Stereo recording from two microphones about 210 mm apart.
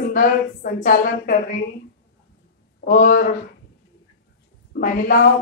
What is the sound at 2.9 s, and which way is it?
Speech, 40° left (ahead or behind).